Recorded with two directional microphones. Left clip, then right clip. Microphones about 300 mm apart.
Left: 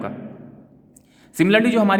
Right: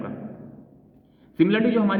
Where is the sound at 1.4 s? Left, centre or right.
Left.